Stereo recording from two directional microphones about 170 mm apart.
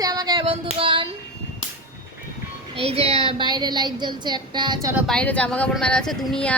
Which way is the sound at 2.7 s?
35° right (ahead or behind).